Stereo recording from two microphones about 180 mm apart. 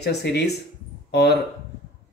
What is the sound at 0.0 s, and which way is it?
Speech, 65° left (ahead or behind).